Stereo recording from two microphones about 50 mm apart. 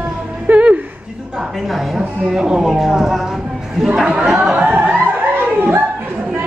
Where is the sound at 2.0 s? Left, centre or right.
Centre.